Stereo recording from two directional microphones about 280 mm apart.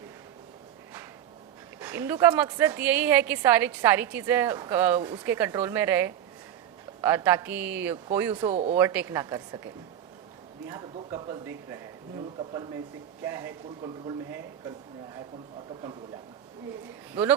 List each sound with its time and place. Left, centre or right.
1.8 s a woman's voice: centre
8.4 s speech: right
8.7 s a woman's voice: centre
10.7 s a woman's voice: centre